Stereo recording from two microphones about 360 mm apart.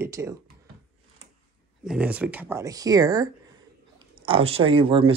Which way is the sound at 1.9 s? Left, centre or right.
Centre.